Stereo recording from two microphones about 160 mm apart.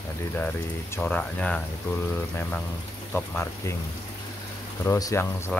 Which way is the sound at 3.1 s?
10° left (ahead or behind).